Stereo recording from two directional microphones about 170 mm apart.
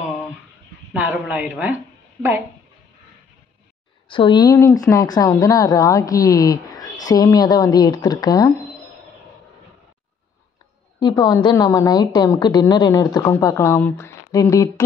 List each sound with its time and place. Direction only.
0.9 s a woman's voice: 10° right (ahead or behind)
4.1 s speech: 25° left (ahead or behind)
11.0 s speech: 25° left (ahead or behind)